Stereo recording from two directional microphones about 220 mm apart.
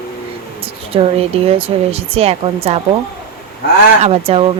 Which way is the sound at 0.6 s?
25° right (ahead or behind).